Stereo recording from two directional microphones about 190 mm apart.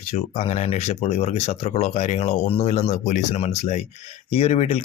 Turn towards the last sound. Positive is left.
turn(degrees=35)  # may be behind; listen again after turning